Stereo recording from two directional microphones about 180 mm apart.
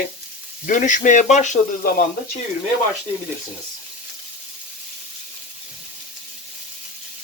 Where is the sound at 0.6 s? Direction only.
45° left (ahead or behind).